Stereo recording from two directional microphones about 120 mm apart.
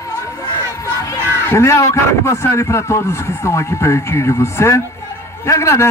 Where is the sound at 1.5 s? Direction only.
25° left (ahead or behind).